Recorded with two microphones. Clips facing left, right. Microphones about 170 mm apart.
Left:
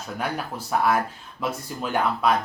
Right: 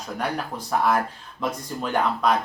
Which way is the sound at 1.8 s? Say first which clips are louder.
Right 1 dB; 5° left (ahead or behind).